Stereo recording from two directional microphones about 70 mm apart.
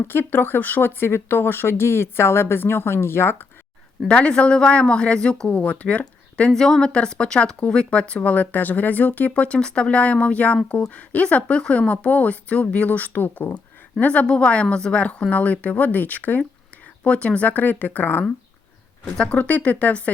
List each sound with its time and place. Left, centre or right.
0.0 s speech: left
4.1 s speech: centre
6.5 s speech: centre; by 18.3 s left
19.0 s speech: centre